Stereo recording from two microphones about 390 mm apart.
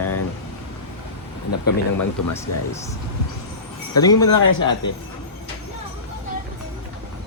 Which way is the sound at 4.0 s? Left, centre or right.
Centre.